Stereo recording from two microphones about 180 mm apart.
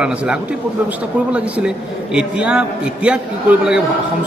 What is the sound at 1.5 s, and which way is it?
A man's voice, 5° right (ahead or behind).